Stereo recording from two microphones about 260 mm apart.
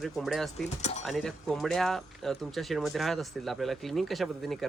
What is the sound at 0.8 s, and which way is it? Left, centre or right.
Speech, left.